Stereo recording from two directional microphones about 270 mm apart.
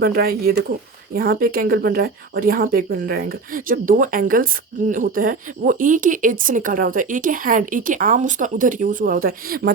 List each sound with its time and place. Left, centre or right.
0.0 s a woman's voice: right